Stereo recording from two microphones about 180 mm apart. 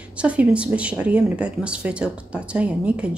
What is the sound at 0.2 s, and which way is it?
Speech, 5° right (ahead or behind).